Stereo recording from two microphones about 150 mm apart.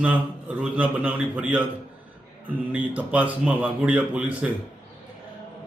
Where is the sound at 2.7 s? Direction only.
10° right (ahead or behind).